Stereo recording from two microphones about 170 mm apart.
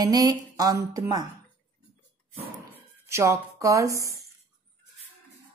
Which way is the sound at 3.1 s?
15° right (ahead or behind).